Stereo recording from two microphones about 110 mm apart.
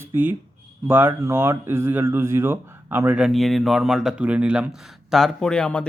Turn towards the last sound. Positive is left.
turn(degrees=10)  # may be behind; listen again after turning